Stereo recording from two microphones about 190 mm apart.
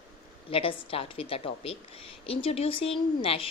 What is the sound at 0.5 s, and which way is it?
A woman's voice, 30° left (ahead or behind).